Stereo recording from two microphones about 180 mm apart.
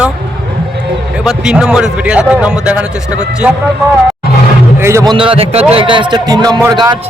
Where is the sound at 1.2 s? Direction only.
5° right (ahead or behind).